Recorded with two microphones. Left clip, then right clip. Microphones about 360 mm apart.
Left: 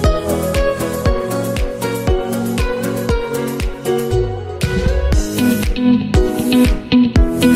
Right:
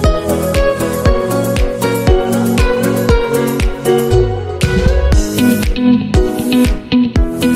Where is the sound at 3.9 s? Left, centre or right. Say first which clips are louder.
Right 5 dB; right.